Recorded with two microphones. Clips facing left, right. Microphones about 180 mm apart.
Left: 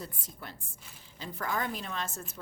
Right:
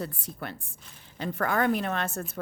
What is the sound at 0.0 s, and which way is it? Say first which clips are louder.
A woman's voice: right 8 dB; 65° right (ahead or behind).